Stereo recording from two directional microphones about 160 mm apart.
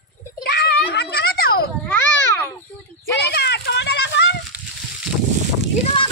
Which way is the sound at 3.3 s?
90° left.